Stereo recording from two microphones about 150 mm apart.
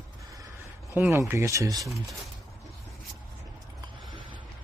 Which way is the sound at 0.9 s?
20° right (ahead or behind).